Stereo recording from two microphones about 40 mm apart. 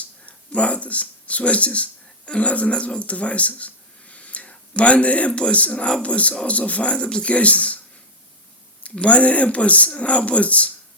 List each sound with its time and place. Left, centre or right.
0.3 s speech: left
8.8 s speech: left